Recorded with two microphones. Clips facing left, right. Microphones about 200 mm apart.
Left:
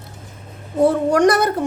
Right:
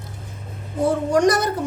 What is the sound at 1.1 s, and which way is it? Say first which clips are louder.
Speech: left 3 dB; 60° left (ahead or behind).